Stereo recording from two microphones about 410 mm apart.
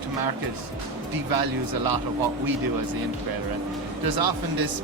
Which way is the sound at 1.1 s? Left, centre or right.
Right.